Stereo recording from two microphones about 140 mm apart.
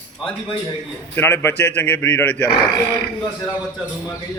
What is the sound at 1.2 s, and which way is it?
A man's voice, 15° left (ahead or behind).